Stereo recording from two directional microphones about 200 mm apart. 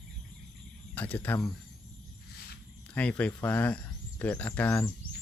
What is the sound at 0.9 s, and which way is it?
Speech, 10° left (ahead or behind).